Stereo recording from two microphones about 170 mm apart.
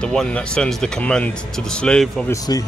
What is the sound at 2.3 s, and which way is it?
Speech, 20° left (ahead or behind).